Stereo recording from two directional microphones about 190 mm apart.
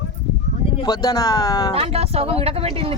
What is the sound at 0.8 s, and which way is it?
Speech, 20° left (ahead or behind).